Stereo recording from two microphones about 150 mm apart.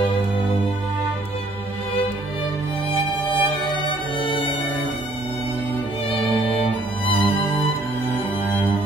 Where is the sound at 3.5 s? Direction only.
35° left (ahead or behind).